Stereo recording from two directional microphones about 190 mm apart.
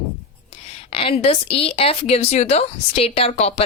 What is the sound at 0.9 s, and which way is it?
Speech, 30° left (ahead or behind).